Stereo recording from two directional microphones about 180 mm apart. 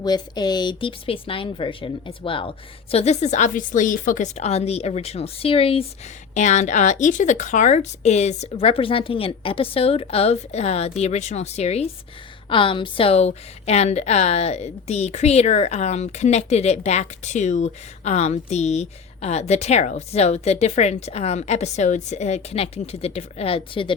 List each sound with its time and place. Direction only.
0.0 s a woman's voice: 25° left (ahead or behind)